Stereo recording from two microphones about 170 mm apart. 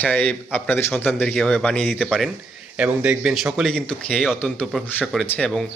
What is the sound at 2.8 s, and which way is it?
A man's voice, 10° right (ahead or behind).